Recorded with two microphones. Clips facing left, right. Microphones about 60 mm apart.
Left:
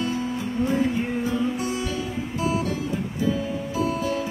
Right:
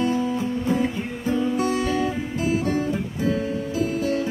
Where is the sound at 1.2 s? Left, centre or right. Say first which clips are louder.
Right 3 dB; right.